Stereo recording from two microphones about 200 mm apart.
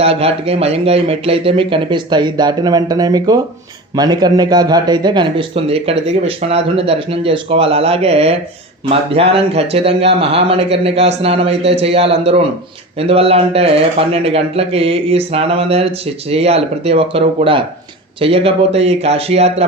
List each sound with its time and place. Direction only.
0.0 s a man's voice: 30° right (ahead or behind)